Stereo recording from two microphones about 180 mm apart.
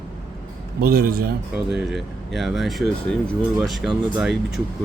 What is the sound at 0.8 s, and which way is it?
Speech, 55° right (ahead or behind).